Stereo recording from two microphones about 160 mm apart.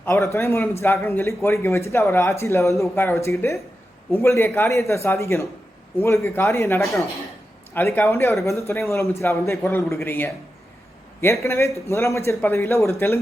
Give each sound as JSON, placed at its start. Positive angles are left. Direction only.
{"t": 0.0, "sound": "a man's voice", "side_deg": 20}